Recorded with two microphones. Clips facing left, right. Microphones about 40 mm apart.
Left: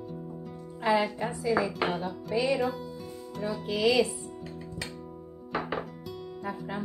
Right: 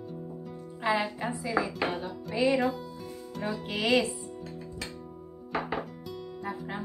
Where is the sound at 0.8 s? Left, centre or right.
Centre.